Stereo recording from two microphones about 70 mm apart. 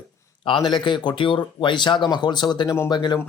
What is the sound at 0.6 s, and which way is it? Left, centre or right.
Speech, left.